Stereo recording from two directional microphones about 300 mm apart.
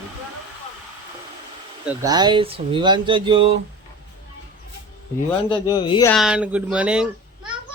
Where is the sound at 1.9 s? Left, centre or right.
Centre.